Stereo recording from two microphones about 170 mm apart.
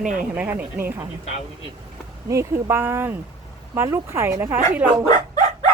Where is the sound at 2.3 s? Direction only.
15° right (ahead or behind).